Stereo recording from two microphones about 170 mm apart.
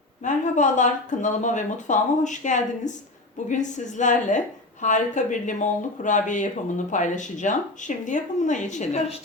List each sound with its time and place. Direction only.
0.2 s a woman's voice: 50° left (ahead or behind)